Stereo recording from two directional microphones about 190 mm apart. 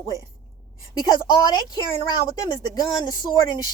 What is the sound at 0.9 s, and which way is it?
Speech, 20° left (ahead or behind).